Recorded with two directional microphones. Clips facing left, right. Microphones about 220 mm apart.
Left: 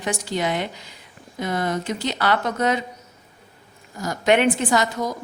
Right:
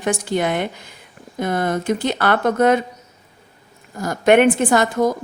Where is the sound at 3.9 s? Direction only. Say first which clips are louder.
Right 5 dB; 55° right (ahead or behind).